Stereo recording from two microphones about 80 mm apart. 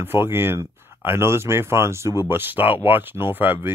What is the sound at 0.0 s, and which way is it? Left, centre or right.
Speech, right.